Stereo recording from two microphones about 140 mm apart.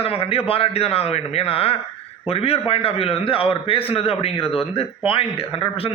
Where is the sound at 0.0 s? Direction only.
45° left (ahead or behind).